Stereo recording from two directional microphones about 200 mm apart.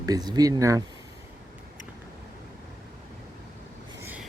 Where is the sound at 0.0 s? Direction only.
20° right (ahead or behind).